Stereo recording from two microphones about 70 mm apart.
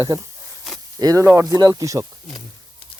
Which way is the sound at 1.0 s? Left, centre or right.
Right.